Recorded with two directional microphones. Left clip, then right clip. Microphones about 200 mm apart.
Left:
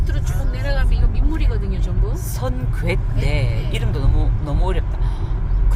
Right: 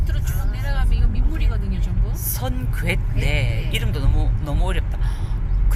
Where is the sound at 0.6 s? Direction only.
45° left (ahead or behind).